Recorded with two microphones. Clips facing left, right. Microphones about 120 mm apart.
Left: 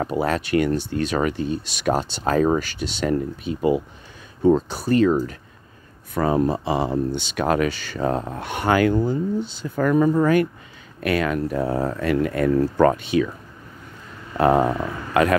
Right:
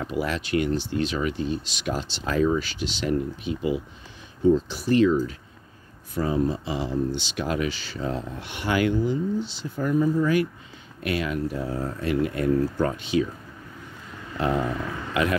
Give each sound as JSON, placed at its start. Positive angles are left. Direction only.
{"t": 0.0, "sound": "speech", "side_deg": 50}
{"t": 6.1, "sound": "speech", "side_deg": 65}
{"t": 9.8, "sound": "speech", "side_deg": 70}
{"t": 14.3, "sound": "speech", "side_deg": 60}